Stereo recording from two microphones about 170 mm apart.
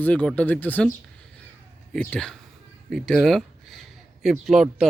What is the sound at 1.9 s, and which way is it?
Speech, 5° left (ahead or behind).